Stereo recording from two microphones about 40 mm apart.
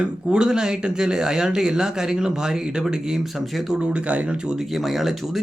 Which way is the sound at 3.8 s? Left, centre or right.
Right.